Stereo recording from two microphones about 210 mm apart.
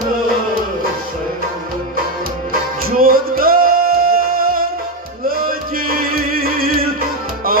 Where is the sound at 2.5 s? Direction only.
45° right (ahead or behind).